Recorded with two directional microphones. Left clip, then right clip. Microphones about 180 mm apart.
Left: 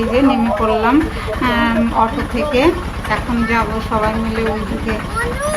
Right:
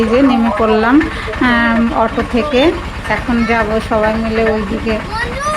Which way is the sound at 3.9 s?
15° right (ahead or behind).